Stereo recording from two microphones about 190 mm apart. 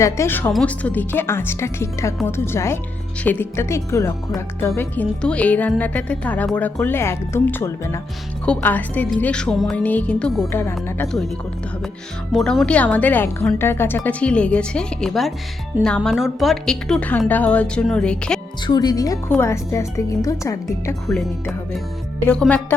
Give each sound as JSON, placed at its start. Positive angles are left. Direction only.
{"t": 0.0, "sound": "a woman's voice", "side_deg": 15}
{"t": 12.3, "sound": "a woman's voice", "side_deg": 0}
{"t": 18.6, "sound": "speech", "side_deg": 20}
{"t": 21.1, "sound": "a woman's voice", "side_deg": 0}